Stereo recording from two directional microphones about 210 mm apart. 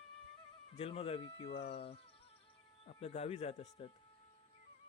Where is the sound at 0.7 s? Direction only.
30° left (ahead or behind).